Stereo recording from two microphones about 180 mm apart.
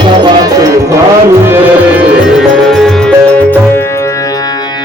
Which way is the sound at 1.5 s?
5° right (ahead or behind).